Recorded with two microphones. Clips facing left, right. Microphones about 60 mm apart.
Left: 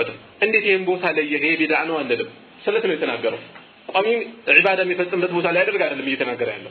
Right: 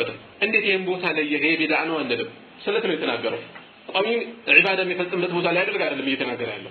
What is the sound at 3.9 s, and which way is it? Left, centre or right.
Speech, centre.